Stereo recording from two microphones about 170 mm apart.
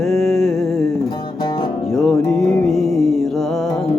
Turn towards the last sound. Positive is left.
turn(degrees=0)  # may be behind; listen again after turning